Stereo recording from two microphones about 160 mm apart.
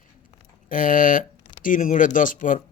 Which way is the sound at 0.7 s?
55° left (ahead or behind).